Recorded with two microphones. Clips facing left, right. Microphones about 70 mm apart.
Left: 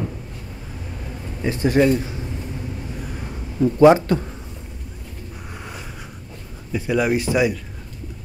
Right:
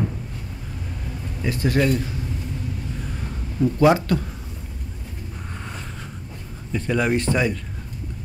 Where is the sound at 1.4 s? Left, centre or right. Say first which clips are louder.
Left 4 dB; left.